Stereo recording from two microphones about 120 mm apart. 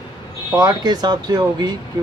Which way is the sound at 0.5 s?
35° right (ahead or behind).